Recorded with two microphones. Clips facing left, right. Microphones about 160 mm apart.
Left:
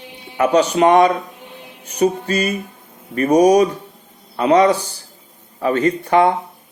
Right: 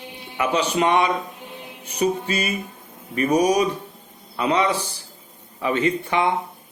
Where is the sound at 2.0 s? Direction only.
35° left (ahead or behind).